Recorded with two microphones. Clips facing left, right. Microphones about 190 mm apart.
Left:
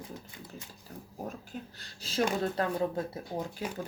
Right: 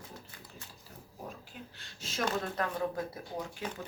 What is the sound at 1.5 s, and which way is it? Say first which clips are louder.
Speech: left 6 dB; 35° left (ahead or behind).